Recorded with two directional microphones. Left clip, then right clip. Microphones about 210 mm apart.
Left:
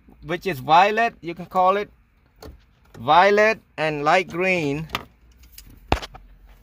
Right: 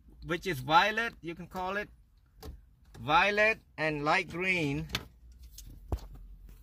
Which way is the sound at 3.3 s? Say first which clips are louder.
Left 10 dB; 55° left (ahead or behind).